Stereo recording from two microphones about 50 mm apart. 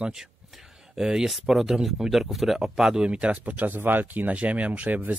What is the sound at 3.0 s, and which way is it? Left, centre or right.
Speech, right.